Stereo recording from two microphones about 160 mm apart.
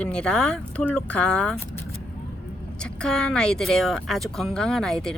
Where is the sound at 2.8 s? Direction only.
5° left (ahead or behind).